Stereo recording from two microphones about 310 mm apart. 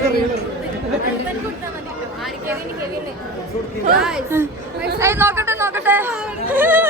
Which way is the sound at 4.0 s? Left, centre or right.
Centre.